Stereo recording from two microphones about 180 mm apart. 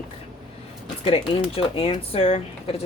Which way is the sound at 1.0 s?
30° left (ahead or behind).